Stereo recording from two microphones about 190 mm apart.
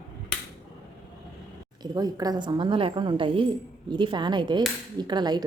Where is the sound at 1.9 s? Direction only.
20° right (ahead or behind).